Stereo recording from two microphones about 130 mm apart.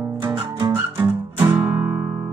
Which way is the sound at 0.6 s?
20° right (ahead or behind).